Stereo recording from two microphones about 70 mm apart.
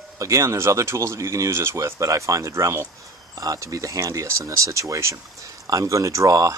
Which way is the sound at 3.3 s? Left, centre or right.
Right.